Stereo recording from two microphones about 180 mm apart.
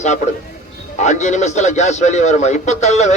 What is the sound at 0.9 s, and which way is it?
A man's voice, 40° left (ahead or behind).